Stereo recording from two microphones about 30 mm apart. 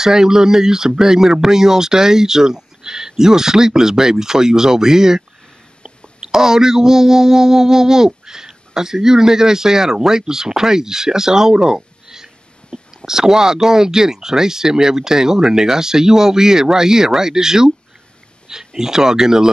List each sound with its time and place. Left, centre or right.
0.0 s speech: centre